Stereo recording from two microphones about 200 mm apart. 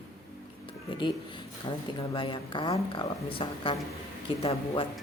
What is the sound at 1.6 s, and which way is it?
Speech, 25° left (ahead or behind).